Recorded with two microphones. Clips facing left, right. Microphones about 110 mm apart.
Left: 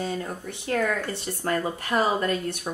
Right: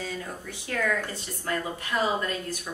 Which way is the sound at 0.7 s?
40° left (ahead or behind).